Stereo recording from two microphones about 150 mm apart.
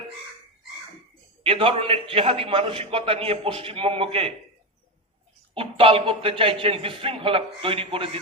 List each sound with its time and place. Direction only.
1.5 s a man's voice: 35° right (ahead or behind)
5.5 s a man's voice: 35° right (ahead or behind)